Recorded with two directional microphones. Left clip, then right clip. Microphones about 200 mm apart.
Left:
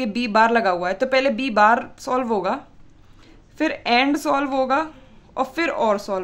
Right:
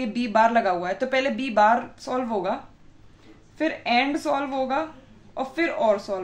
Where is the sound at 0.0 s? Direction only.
40° left (ahead or behind).